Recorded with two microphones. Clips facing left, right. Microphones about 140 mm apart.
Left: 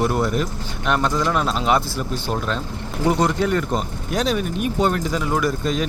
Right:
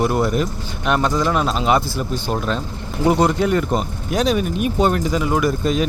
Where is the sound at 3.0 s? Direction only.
15° right (ahead or behind).